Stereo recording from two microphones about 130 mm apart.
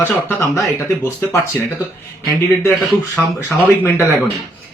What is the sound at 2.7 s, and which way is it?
Speech, centre (ahead or behind).